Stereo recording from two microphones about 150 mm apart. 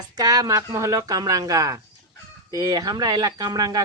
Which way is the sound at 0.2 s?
25° right (ahead or behind).